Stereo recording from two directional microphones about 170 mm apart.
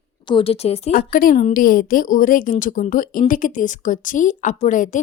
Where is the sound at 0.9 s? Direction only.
55° left (ahead or behind).